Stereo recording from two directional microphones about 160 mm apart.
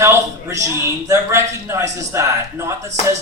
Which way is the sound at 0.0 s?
15° right (ahead or behind).